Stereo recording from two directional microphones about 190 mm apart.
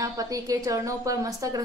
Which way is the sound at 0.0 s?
20° right (ahead or behind).